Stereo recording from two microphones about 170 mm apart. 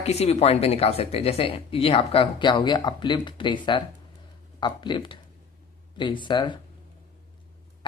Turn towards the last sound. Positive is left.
turn(degrees=30)  # may be behind; listen again after turning